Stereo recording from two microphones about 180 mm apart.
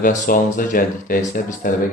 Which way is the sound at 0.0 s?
50° left (ahead or behind).